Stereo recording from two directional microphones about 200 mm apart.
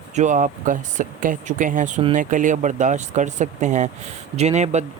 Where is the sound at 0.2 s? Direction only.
40° right (ahead or behind).